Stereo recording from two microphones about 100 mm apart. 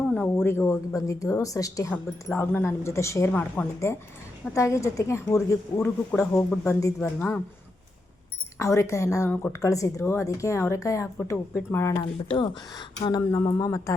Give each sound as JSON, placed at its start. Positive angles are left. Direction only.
{"t": 0.3, "sound": "speech", "side_deg": 25}
{"t": 1.9, "sound": "speech", "side_deg": 20}
{"t": 3.3, "sound": "speech", "side_deg": 20}
{"t": 4.5, "sound": "speech", "side_deg": 30}
{"t": 5.8, "sound": "speech", "side_deg": 15}
{"t": 6.7, "sound": "speech", "side_deg": 35}
{"t": 7.0, "sound": "speech", "side_deg": 15}
{"t": 8.5, "sound": "speech", "side_deg": 30}
{"t": 9.3, "sound": "speech", "side_deg": 20}
{"t": 9.6, "sound": "speech", "side_deg": 35}
{"t": 12.3, "sound": "speech", "side_deg": 50}
{"t": 13.3, "sound": "speech", "side_deg": 30}